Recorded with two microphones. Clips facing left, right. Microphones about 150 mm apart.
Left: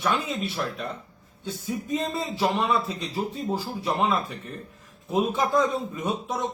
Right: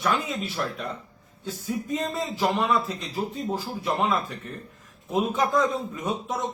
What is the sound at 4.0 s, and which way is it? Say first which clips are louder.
A man's voice: left 2 dB; centre (ahead or behind).